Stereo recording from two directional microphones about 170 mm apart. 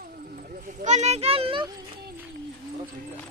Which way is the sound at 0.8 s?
40° right (ahead or behind).